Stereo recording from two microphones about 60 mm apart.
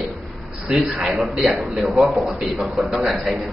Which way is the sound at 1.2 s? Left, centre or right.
Centre.